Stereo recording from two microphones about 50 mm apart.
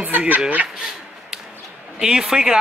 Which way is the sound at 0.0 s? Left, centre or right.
Right.